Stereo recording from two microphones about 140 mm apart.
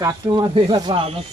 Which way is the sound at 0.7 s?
35° right (ahead or behind).